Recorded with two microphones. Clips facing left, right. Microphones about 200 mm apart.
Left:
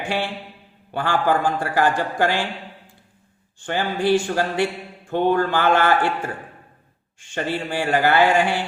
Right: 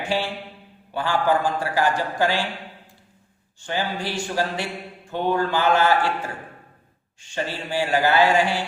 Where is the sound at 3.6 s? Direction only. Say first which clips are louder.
Left 5 dB; 55° left (ahead or behind).